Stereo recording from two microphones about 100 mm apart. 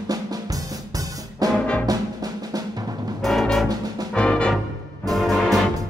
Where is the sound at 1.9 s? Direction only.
40° right (ahead or behind).